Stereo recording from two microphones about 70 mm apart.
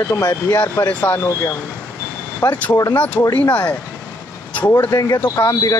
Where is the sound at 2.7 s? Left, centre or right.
Left.